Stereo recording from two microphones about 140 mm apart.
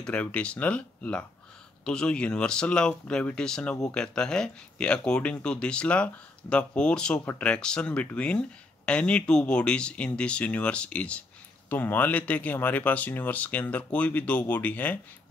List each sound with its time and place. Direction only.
0.0 s speech: 10° left (ahead or behind)